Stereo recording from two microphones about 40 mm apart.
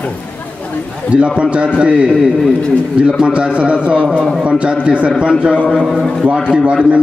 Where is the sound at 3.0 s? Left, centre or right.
Right.